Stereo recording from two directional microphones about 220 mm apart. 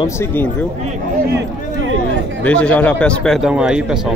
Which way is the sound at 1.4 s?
55° right (ahead or behind).